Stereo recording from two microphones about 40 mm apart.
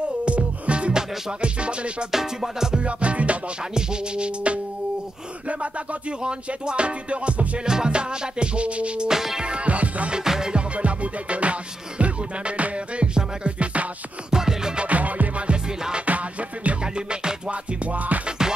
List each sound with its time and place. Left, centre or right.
0.2 s music: right
2.0 s music: centre
2.8 s music: right
3.7 s music: right
7.6 s music: centre
9.1 s music: centre
9.4 s music: right
10.1 s music: centre
10.5 s music: right
14.3 s music: centre
14.8 s music: right
16.8 s music: right
17.5 s music: right
18.4 s music: centre